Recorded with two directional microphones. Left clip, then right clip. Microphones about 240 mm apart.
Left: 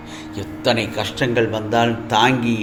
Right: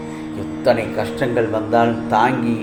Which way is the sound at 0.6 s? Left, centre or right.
Left.